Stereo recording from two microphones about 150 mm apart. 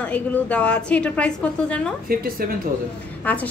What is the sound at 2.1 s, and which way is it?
Speech, 75° right (ahead or behind).